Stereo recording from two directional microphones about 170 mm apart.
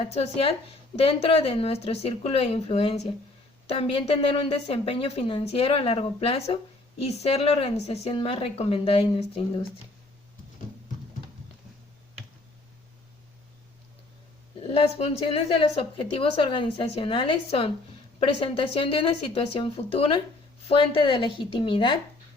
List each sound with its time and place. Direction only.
0.1 s a woman's voice: 35° left (ahead or behind)
14.7 s a woman's voice: 35° left (ahead or behind)